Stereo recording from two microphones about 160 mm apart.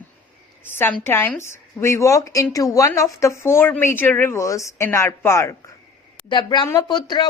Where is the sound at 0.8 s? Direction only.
15° left (ahead or behind).